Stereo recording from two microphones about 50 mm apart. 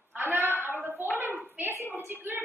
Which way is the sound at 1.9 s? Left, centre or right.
Right.